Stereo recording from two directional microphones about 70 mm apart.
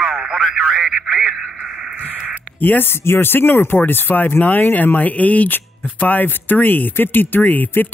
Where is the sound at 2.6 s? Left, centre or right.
Left.